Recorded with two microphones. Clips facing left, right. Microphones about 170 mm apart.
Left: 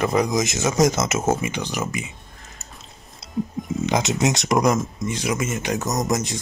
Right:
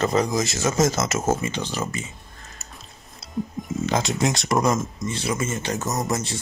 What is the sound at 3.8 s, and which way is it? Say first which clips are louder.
Speech: left 2 dB; 20° left (ahead or behind).